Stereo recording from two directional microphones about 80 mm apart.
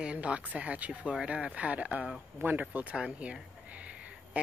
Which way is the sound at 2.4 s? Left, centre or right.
Right.